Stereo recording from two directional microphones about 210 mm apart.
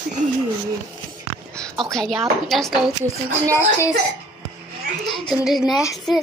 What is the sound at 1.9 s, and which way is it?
Speech, centre (ahead or behind).